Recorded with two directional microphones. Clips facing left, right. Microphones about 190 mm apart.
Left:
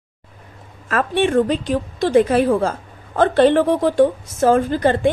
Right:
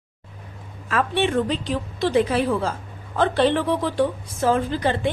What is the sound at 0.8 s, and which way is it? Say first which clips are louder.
A woman's voice: left 4 dB; 50° left (ahead or behind).